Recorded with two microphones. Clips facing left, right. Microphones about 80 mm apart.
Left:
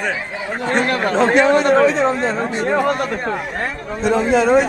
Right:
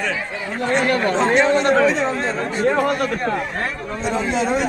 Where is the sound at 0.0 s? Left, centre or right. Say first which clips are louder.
Left 1 dB; centre.